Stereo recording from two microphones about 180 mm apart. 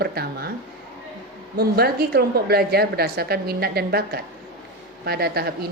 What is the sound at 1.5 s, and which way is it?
A woman's voice, 60° right (ahead or behind).